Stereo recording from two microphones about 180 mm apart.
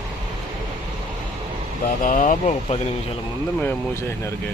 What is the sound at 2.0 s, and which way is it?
Speech, 45° left (ahead or behind).